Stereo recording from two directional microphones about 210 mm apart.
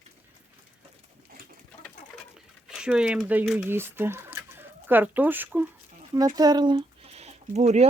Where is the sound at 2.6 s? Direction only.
5° right (ahead or behind).